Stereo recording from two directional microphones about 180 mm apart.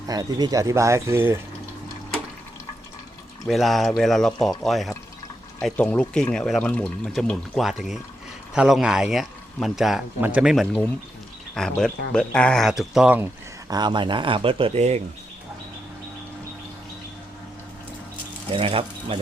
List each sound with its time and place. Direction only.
0.1 s speech: 20° right (ahead or behind)
3.4 s a man's voice: centre (ahead or behind); by 15.0 s 35° right (ahead or behind)
18.5 s speech: 30° right (ahead or behind)